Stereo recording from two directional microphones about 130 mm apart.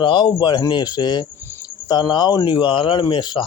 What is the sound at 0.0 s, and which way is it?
Speech, 40° left (ahead or behind).